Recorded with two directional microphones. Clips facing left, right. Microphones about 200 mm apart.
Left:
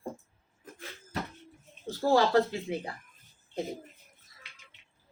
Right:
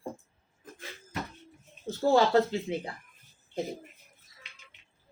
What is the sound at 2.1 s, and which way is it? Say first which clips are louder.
Speech: right 1 dB; 25° right (ahead or behind).